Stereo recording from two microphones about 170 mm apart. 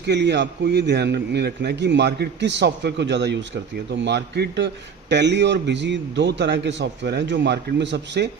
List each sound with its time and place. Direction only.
0.0 s a man's voice: 90° right